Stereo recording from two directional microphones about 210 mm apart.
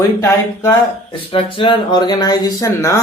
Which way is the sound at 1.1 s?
25° left (ahead or behind).